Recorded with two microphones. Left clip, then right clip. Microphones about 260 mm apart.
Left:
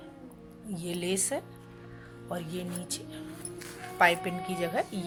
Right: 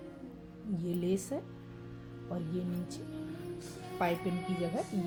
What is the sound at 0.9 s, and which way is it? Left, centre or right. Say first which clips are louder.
Speech: left 2 dB; left.